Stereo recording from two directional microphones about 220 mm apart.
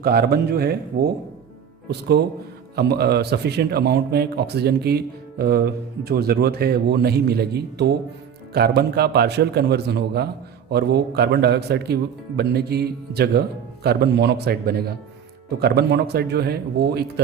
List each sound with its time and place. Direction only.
0.0 s a man's voice: 45° right (ahead or behind)